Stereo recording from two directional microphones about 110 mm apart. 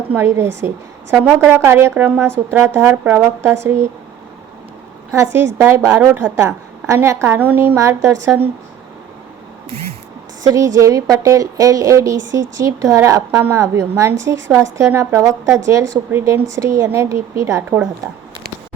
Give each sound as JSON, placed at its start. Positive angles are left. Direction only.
{"t": 0.1, "sound": "a woman's voice", "side_deg": -20}
{"t": 5.1, "sound": "a woman's voice", "side_deg": -20}
{"t": 10.5, "sound": "a woman's voice", "side_deg": -30}